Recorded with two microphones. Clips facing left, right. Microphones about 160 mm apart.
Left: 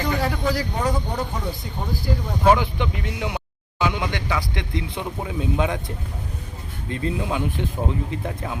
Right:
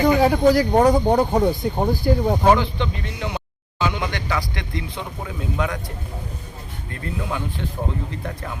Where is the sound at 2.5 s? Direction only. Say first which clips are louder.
Right 1 dB; 15° left (ahead or behind).